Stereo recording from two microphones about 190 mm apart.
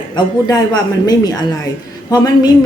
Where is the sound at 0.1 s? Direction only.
20° left (ahead or behind).